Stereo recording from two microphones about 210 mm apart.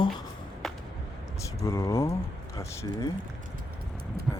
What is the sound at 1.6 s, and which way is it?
Speech, 15° left (ahead or behind).